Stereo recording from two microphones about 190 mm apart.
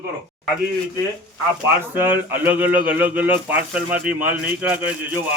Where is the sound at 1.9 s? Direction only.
10° right (ahead or behind).